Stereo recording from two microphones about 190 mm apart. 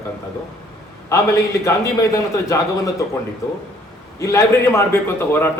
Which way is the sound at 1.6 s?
15° left (ahead or behind).